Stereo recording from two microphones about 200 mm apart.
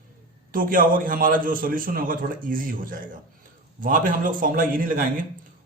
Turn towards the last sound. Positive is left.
turn(degrees=-45)  # may be behind; listen again after turning